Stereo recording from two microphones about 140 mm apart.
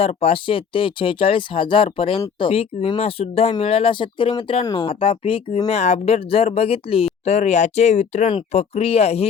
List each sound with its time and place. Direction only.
0.0 s speech: 45° left (ahead or behind)
5.6 s speech: 50° left (ahead or behind)